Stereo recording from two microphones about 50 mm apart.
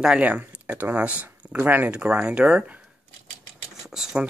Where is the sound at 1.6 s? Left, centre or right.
Right.